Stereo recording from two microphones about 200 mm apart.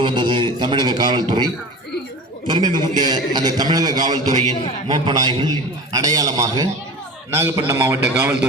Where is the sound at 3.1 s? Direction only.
20° right (ahead or behind).